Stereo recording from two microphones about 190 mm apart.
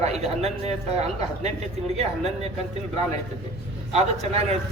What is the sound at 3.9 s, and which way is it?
Speech, 35° right (ahead or behind).